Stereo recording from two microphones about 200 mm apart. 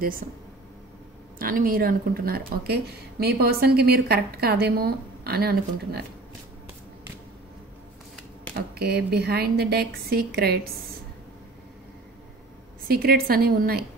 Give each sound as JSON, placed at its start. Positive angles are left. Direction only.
{"t": 1.4, "sound": "speech", "side_deg": -45}
{"t": 8.5, "sound": "speech", "side_deg": -55}
{"t": 12.8, "sound": "speech", "side_deg": -50}